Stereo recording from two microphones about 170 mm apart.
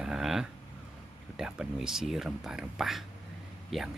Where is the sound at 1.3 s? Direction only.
5° right (ahead or behind).